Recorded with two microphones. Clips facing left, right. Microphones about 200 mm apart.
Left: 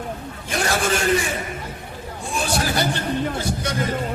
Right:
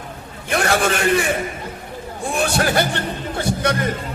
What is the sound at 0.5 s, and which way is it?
Speech, 65° right (ahead or behind).